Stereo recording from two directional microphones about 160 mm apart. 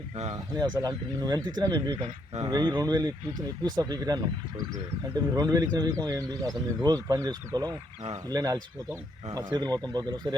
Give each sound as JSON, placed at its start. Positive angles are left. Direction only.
{"t": 0.5, "sound": "speech", "side_deg": -25}